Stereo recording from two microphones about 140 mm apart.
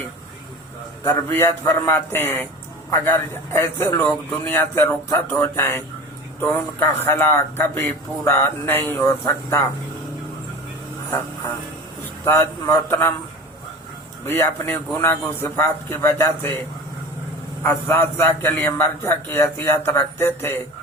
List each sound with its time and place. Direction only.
1.3 s a man's voice: 20° left (ahead or behind)
9.0 s a man's voice: 25° left (ahead or behind)
12.2 s a man's voice: 20° left (ahead or behind)
14.3 s a man's voice: 15° left (ahead or behind)
17.6 s a man's voice: 15° left (ahead or behind)